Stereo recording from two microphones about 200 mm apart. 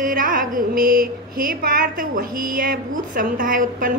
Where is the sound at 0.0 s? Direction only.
45° right (ahead or behind).